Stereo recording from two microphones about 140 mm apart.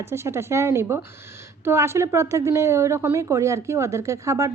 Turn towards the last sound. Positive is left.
turn(degrees=-20)  # may be behind; listen again after turning